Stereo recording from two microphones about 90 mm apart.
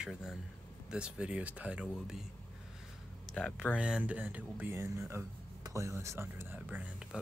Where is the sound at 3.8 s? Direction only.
10° right (ahead or behind).